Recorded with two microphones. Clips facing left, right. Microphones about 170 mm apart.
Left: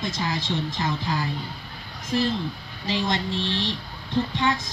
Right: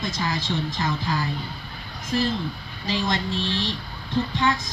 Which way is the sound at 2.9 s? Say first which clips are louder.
Even; 25° left (ahead or behind).